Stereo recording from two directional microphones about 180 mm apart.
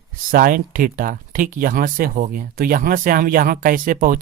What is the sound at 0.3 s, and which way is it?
Speech, 50° right (ahead or behind).